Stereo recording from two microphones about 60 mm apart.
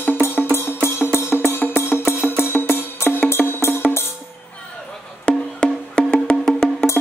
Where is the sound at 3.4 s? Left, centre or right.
Centre.